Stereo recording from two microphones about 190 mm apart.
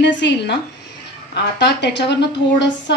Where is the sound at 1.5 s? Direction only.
65° left (ahead or behind).